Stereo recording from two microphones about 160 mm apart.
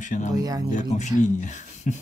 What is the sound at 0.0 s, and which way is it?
Speech, 50° left (ahead or behind).